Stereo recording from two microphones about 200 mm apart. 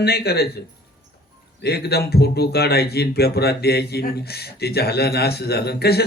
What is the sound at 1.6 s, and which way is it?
Speech, 55° left (ahead or behind).